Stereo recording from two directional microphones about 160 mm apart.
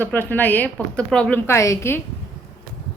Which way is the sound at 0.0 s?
10° left (ahead or behind).